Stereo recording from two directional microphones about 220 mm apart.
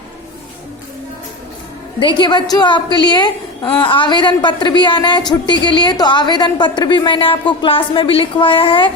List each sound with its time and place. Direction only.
2.0 s a woman's voice: 20° left (ahead or behind)